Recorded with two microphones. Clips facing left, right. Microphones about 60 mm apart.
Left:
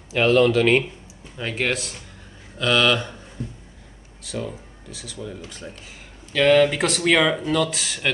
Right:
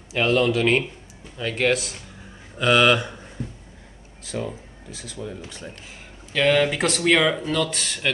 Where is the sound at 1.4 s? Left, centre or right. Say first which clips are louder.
Right 3 dB; centre.